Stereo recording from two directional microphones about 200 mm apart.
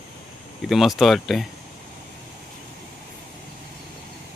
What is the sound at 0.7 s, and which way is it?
Speech, centre (ahead or behind).